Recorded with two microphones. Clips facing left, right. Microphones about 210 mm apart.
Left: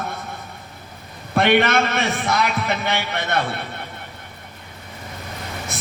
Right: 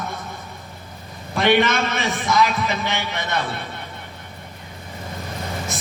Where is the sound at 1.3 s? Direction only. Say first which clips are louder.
Left 1 dB; 60° left (ahead or behind).